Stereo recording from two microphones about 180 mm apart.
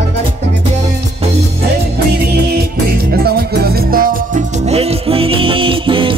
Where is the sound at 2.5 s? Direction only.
60° right (ahead or behind).